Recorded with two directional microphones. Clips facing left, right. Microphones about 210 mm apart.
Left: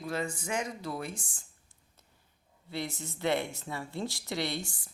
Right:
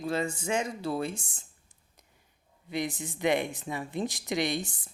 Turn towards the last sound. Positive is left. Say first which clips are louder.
# right 4 dB
turn(degrees=-20)  # may be behind; listen again after turning